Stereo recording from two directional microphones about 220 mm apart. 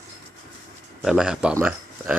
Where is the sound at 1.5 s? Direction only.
10° right (ahead or behind).